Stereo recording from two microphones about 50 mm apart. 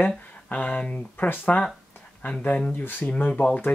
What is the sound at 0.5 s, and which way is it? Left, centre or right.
Speech, left.